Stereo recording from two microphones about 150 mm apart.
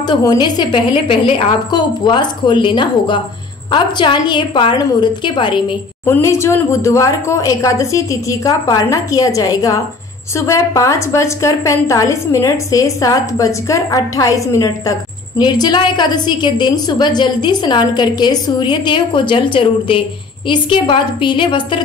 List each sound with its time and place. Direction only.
0.0 s a woman's voice: 25° left (ahead or behind)
6.0 s a woman's voice: 15° left (ahead or behind); by 21.8 s 30° left (ahead or behind)